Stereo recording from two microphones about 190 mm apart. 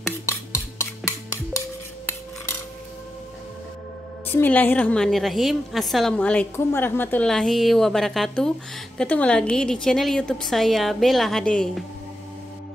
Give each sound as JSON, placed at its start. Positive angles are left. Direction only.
{"t": 0.3, "sound": "cutlery", "side_deg": 15}
{"t": 4.3, "sound": "a woman's voice", "side_deg": 10}